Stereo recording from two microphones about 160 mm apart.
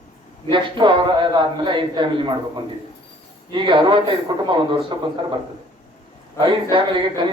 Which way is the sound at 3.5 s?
30° right (ahead or behind).